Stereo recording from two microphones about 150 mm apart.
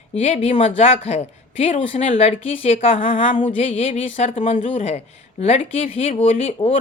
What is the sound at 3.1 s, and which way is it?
Music, 60° left (ahead or behind).